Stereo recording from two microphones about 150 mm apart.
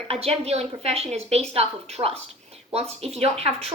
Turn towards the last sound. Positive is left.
turn(degrees=-45)  # may be behind; listen again after turning